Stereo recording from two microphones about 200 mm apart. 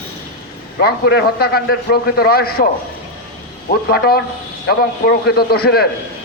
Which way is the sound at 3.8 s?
50° left (ahead or behind).